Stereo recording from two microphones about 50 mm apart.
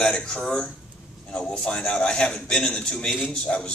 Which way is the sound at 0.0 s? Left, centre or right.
Centre.